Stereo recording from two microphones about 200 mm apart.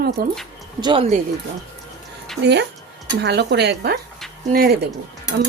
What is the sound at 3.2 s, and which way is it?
Speech, 60° right (ahead or behind).